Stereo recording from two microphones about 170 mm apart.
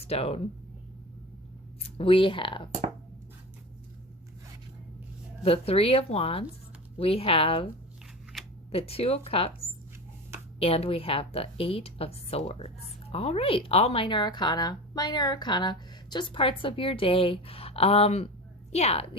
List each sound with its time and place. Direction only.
0.0 s speech: 35° left (ahead or behind)
1.8 s speech: 30° left (ahead or behind)
5.4 s a woman's voice: 35° left (ahead or behind)
8.7 s a woman's voice: 35° left (ahead or behind)